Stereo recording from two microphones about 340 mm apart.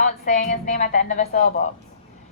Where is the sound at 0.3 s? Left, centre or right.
Left.